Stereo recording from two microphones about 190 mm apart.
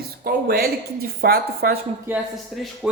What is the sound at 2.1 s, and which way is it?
Speech, 10° right (ahead or behind).